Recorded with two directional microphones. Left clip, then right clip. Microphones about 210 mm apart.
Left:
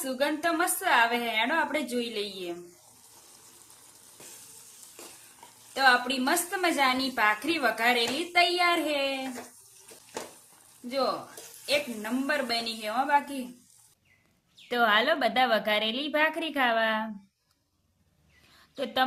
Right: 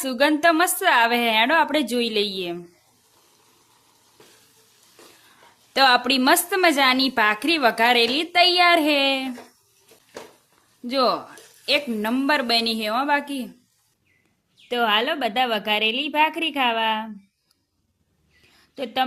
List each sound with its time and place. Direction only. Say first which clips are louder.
0.0 s a woman's voice: right 10 dB; 50° right (ahead or behind)
5.7 s a woman's voice: right 6 dB; 50° right (ahead or behind)
10.8 s a woman's voice: right 8 dB; 55° right (ahead or behind)
14.7 s a woman's voice: right 3 dB; 15° right (ahead or behind)
18.4 s a sound: right 3 dB; 10° right (ahead or behind)